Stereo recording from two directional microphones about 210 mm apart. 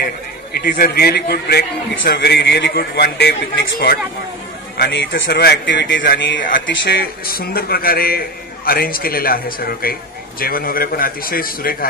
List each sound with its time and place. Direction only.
0.5 s a man's voice: 45° left (ahead or behind)